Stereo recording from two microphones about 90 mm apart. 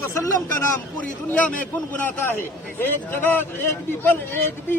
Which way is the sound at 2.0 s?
25° left (ahead or behind).